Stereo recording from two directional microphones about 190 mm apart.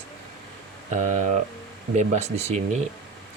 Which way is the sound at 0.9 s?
40° right (ahead or behind).